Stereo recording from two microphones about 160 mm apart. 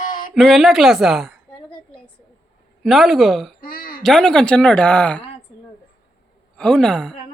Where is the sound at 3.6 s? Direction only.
70° left (ahead or behind).